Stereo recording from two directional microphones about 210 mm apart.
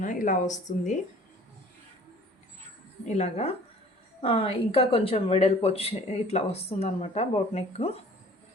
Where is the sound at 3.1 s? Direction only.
35° left (ahead or behind).